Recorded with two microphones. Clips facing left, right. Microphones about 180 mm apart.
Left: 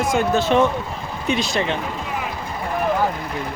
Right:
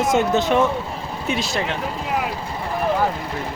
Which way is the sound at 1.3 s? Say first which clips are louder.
Left 3 dB; 5° right (ahead or behind).